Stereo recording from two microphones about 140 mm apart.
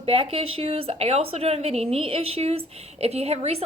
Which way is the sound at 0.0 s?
40° right (ahead or behind).